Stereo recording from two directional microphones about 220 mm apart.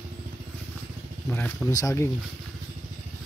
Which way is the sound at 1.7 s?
15° left (ahead or behind).